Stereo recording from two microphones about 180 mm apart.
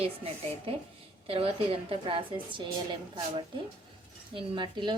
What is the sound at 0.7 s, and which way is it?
A woman's voice, 30° right (ahead or behind).